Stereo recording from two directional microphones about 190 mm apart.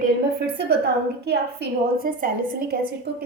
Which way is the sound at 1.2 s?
55° right (ahead or behind).